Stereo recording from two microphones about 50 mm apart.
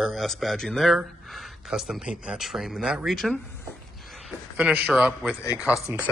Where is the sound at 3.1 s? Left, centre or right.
Centre.